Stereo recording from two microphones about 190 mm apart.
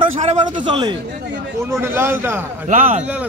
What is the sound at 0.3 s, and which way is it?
Speech, 25° right (ahead or behind).